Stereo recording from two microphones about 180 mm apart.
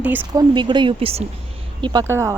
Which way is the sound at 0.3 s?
25° right (ahead or behind).